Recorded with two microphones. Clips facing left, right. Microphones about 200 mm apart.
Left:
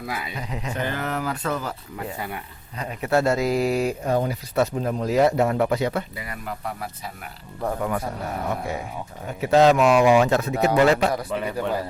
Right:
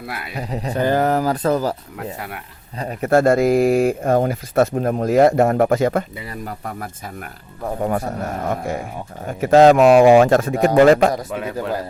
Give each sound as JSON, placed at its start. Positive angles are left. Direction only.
{"t": 0.3, "sound": "speech", "side_deg": -35}
{"t": 2.0, "sound": "speech", "side_deg": 0}
{"t": 2.7, "sound": "speech", "side_deg": -35}
{"t": 3.1, "sound": "speech", "side_deg": -50}
{"t": 6.1, "sound": "speech", "side_deg": -30}
{"t": 11.3, "sound": "speech", "side_deg": 0}